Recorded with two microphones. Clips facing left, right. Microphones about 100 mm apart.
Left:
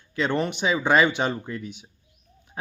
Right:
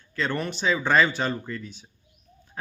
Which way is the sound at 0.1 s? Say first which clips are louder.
Left 3 dB; 20° left (ahead or behind).